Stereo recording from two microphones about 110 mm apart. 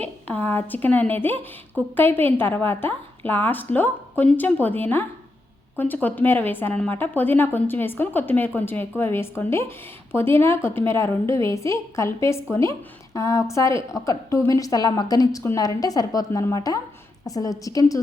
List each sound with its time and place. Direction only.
0.0 s a woman's voice: 15° left (ahead or behind); by 18.0 s 30° left (ahead or behind)